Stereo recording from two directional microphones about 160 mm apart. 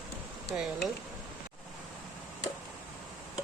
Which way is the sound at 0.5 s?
5° right (ahead or behind).